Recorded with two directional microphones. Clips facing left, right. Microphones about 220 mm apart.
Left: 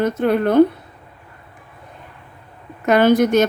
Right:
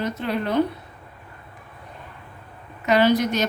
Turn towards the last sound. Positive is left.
turn(degrees=50)  # may be behind; listen again after turning